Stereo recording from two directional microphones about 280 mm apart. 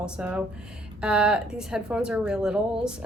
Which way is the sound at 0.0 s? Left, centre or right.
Centre.